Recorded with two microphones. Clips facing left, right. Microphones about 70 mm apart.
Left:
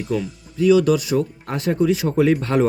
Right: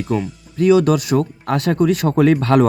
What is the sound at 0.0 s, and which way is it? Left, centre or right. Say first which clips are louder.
Speech: right 3 dB; right.